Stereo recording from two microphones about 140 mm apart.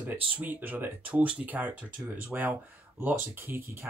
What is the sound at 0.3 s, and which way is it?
Speech, 10° right (ahead or behind).